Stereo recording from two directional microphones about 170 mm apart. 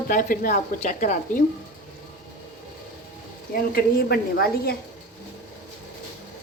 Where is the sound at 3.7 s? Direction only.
65° left (ahead or behind).